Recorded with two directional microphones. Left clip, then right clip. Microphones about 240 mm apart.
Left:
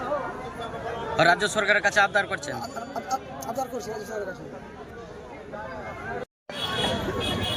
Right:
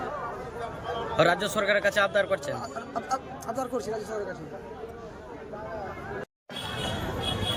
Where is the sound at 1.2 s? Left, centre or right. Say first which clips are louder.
Left 3 dB; centre.